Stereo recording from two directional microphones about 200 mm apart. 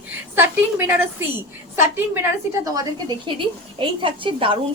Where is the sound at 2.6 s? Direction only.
20° right (ahead or behind).